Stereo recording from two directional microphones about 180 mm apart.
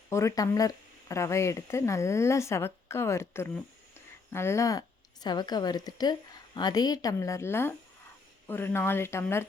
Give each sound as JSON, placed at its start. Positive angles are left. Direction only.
{"t": 0.1, "sound": "a woman's voice", "side_deg": 15}